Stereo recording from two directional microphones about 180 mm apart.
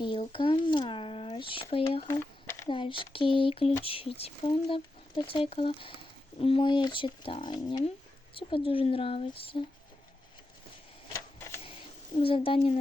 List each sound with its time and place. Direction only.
0.0 s speech: 30° left (ahead or behind)
2.0 s a sound: 15° left (ahead or behind)
2.6 s speech: 30° left (ahead or behind)
11.1 s typewriter: 15° left (ahead or behind)
12.2 s speech: 30° left (ahead or behind)